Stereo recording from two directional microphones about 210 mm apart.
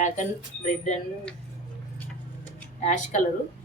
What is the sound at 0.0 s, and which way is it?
Speech, 35° left (ahead or behind).